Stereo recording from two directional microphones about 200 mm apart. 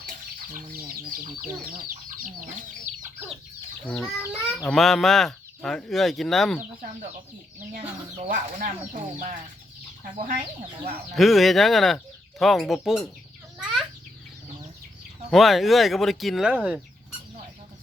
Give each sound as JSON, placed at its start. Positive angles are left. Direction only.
{"t": 0.7, "sound": "speech", "side_deg": -45}
{"t": 3.8, "sound": "speech", "side_deg": 5}
{"t": 8.2, "sound": "speech", "side_deg": -40}
{"t": 11.1, "sound": "speech", "side_deg": 0}
{"t": 15.3, "sound": "speech", "side_deg": 0}